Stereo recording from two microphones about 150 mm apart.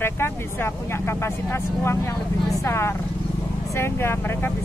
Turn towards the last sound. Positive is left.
turn(degrees=15)  # may be behind; listen again after turning